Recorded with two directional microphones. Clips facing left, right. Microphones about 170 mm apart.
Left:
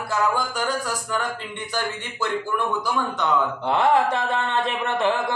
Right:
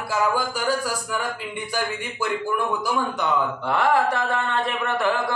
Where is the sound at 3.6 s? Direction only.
20° left (ahead or behind).